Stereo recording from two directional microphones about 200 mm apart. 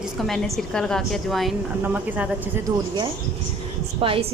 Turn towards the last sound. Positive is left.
turn(degrees=-25)  # may be behind; listen again after turning